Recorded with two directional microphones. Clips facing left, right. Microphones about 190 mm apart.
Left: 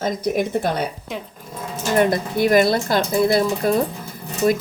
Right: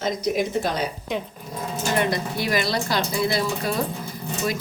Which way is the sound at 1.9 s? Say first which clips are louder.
Left 8 dB; 50° left (ahead or behind).